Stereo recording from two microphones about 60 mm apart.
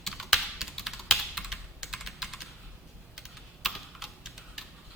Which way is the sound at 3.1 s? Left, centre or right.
Centre.